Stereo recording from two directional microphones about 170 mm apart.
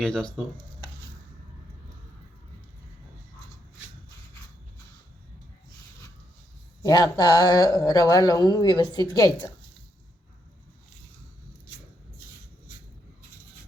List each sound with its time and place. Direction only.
0.0 s speech: 5° left (ahead or behind)
6.8 s speech: 20° left (ahead or behind)